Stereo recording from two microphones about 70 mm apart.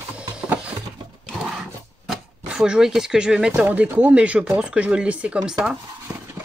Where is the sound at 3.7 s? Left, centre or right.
Right; by 5.8 s centre.